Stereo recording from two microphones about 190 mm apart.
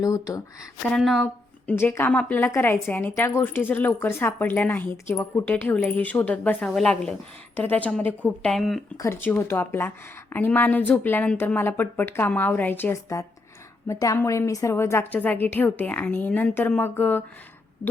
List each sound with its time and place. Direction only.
0.0 s speech: 20° left (ahead or behind)
0.9 s speech: centre (ahead or behind)
9.0 s speech: 15° left (ahead or behind)